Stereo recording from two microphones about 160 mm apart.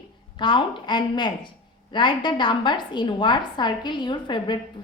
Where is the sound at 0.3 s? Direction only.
30° left (ahead or behind).